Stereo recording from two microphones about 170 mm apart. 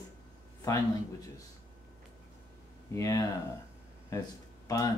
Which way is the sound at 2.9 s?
20° left (ahead or behind).